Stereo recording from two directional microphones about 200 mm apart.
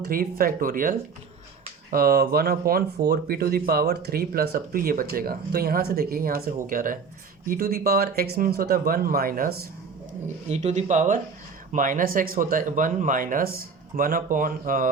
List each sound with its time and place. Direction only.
0.0 s speech: 45° right (ahead or behind)
10.5 s speech: 35° right (ahead or behind)